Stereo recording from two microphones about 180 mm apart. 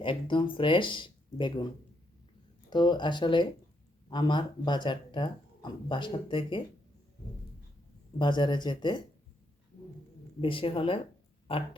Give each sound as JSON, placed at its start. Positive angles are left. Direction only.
{"t": 0.0, "sound": "speech", "side_deg": 25}
{"t": 2.6, "sound": "speech", "side_deg": 25}
{"t": 8.2, "sound": "speech", "side_deg": 25}
{"t": 10.4, "sound": "speech", "side_deg": 30}